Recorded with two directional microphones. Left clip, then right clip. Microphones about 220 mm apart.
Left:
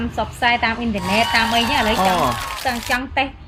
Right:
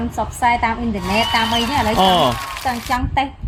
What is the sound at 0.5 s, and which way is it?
Speech, 20° left (ahead or behind).